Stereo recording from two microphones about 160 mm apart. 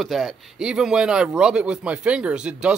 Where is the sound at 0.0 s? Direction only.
Centre (ahead or behind).